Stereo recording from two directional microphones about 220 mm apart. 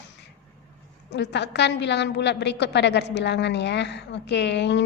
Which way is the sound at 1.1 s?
50° left (ahead or behind).